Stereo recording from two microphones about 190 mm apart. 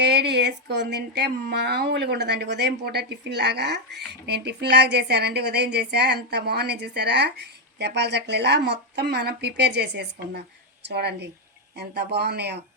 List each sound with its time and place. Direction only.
0.0 s speech: 60° right (ahead or behind)